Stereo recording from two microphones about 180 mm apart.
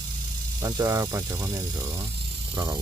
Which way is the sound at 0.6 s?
20° right (ahead or behind).